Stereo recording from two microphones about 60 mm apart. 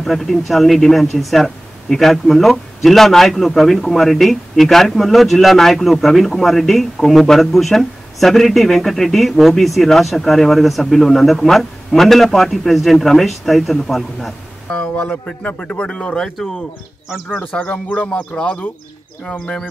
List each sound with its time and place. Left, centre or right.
0.0 s speech: centre
14.7 s a man's voice: left
17.4 s a man's voice: left